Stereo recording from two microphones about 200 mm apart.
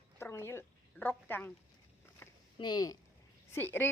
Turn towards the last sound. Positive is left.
turn(degrees=10)  # may be behind; listen again after turning